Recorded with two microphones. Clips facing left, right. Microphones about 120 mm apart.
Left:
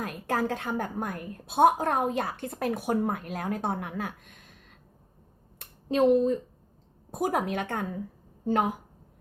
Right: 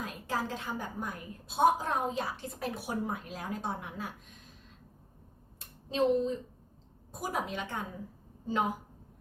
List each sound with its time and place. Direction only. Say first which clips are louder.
0.0 s a woman's voice: left 6 dB; 60° left (ahead or behind)
5.5 s a sound: left 6 dB; 60° left (ahead or behind)
7.1 s a woman's voice: left 7 dB; 55° left (ahead or behind)